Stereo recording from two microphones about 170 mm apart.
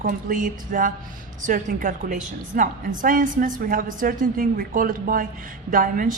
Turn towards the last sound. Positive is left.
turn(degrees=-55)  # may be behind; listen again after turning